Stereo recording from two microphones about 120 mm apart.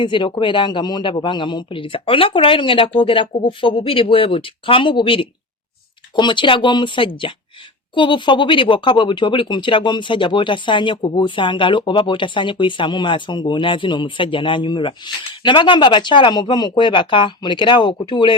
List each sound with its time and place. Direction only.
0.0 s a man's voice: 40° left (ahead or behind)